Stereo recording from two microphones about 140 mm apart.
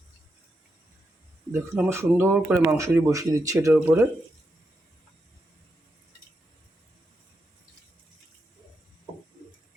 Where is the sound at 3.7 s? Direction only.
10° right (ahead or behind).